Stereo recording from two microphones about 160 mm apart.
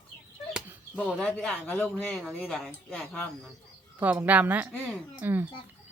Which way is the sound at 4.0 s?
10° right (ahead or behind).